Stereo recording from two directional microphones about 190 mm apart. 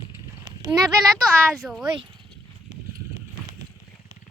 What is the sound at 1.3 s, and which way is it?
Speech, 5° left (ahead or behind).